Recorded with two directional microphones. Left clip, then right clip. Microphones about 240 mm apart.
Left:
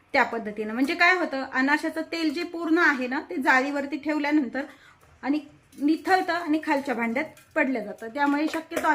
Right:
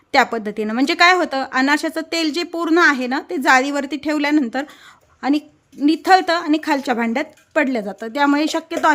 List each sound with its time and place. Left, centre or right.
0.1 s speech: right